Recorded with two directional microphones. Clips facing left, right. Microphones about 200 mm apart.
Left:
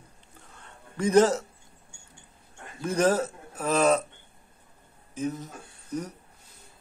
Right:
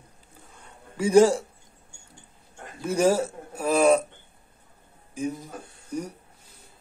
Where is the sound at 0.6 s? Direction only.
10° right (ahead or behind).